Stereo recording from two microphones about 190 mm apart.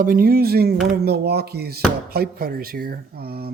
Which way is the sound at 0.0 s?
50° right (ahead or behind).